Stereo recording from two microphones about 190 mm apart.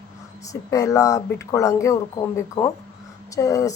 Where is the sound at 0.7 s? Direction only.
15° left (ahead or behind).